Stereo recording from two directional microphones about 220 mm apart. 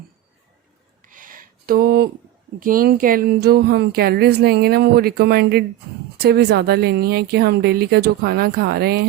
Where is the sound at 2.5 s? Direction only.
40° right (ahead or behind).